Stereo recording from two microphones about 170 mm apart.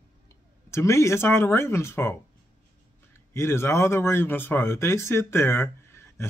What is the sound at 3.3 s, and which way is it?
Speech, 15° left (ahead or behind).